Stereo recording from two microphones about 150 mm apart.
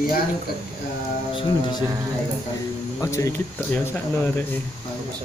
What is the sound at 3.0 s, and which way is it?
Speech, 20° left (ahead or behind).